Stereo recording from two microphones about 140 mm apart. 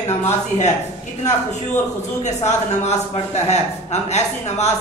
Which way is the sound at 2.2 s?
55° left (ahead or behind).